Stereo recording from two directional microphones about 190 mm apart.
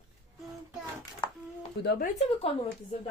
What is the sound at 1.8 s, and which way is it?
Speech, 55° left (ahead or behind).